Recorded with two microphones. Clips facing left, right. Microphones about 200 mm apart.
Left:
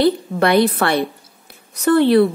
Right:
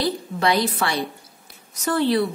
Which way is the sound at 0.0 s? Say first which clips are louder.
Left 7 dB; 60° left (ahead or behind).